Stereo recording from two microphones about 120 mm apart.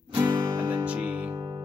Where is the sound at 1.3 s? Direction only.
30° right (ahead or behind).